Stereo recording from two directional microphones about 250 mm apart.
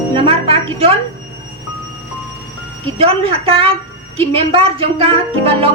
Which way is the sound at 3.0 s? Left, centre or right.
Right.